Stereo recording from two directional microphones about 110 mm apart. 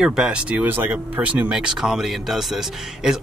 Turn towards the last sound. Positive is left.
turn(degrees=-5)  # may be behind; listen again after turning